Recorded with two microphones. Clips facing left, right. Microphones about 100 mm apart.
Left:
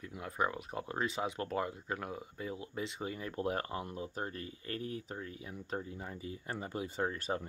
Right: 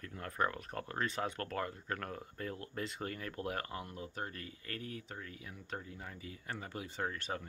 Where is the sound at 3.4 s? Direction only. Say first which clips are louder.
Left 5 dB; 25° left (ahead or behind).